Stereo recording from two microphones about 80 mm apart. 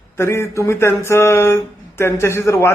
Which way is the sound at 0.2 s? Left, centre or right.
Left.